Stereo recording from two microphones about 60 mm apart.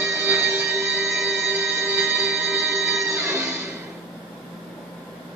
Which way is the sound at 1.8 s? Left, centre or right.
Right.